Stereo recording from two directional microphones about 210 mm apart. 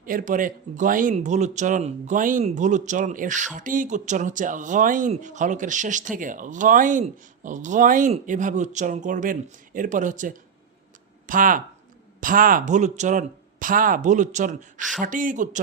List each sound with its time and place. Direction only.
0.0 s speech: 40° right (ahead or behind)